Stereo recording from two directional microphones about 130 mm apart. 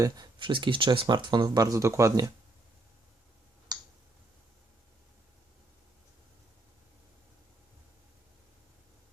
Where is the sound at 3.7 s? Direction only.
30° right (ahead or behind).